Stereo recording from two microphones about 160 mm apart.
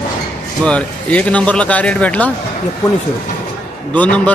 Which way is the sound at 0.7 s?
10° left (ahead or behind).